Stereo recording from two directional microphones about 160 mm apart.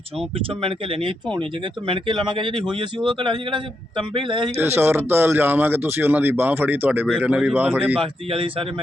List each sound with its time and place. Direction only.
0.2 s a man's voice: 35° right (ahead or behind)
4.6 s speech: 15° right (ahead or behind)
7.9 s a man's voice: 35° right (ahead or behind)